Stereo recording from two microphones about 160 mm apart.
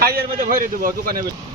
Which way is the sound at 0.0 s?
70° right (ahead or behind).